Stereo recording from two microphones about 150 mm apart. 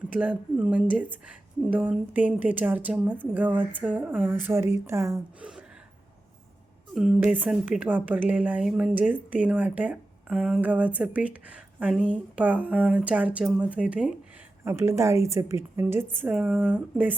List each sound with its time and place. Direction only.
0.1 s speech: 10° right (ahead or behind)
5.4 s gasp: 5° right (ahead or behind)
6.9 s speech: 5° right (ahead or behind)
16.2 s speech: 5° right (ahead or behind)